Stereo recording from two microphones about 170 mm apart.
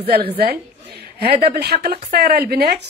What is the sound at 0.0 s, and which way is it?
A woman's voice, 65° right (ahead or behind).